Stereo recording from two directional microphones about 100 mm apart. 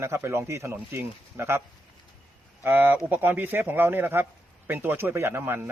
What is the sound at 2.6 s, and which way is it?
A man's voice, 20° right (ahead or behind).